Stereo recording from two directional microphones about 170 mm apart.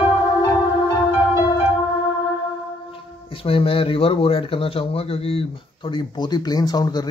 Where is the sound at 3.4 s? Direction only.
30° left (ahead or behind).